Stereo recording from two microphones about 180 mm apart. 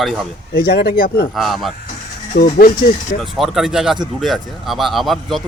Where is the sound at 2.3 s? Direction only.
50° left (ahead or behind).